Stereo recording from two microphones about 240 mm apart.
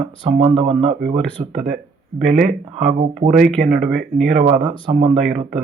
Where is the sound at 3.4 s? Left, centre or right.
Centre.